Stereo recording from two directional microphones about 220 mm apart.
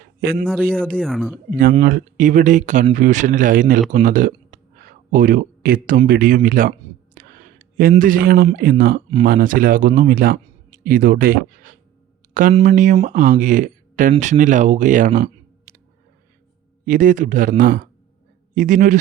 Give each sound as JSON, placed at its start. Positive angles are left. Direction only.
{"t": 0.2, "sound": "speech", "side_deg": -45}
{"t": 0.9, "sound": "speech", "side_deg": 0}
{"t": 1.5, "sound": "speech", "side_deg": -40}
{"t": 16.8, "sound": "speech", "side_deg": -35}